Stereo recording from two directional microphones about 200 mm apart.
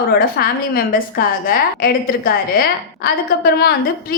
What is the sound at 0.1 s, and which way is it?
A woman's voice, 50° left (ahead or behind).